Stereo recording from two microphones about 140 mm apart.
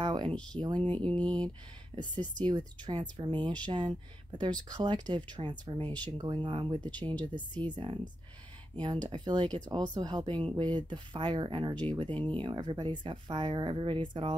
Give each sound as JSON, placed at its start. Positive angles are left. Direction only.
{"t": 0.0, "sound": "a sound", "side_deg": -35}
{"t": 0.6, "sound": "speech", "side_deg": -35}
{"t": 1.0, "sound": "speech", "side_deg": 10}
{"t": 2.4, "sound": "speech", "side_deg": -35}